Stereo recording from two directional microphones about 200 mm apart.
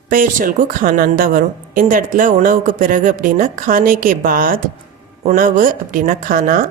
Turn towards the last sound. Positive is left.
turn(degrees=-45)  # may be behind; listen again after turning